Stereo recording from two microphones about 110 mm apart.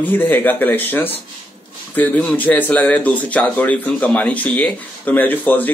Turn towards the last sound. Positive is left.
turn(degrees=15)  # may be behind; listen again after turning